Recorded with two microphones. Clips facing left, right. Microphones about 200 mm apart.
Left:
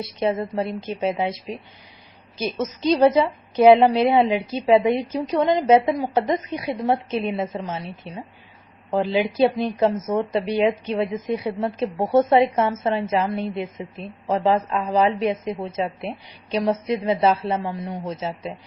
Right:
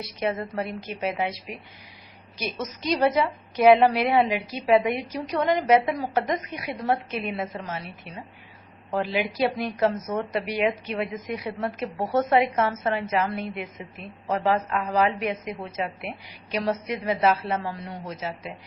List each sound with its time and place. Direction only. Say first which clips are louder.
0.0 s a woman's voice: left 5 dB; 25° left (ahead or behind)